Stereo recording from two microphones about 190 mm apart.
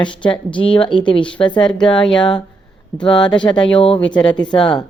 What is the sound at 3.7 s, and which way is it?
Speech, 25° left (ahead or behind).